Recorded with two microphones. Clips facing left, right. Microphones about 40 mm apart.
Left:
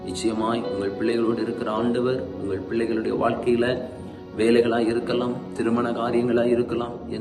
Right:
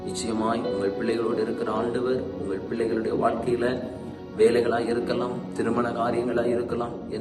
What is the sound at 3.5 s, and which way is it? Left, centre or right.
Speech, left.